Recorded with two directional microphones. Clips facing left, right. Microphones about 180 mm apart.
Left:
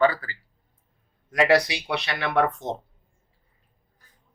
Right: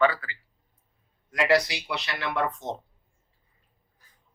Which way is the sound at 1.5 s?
65° left (ahead or behind).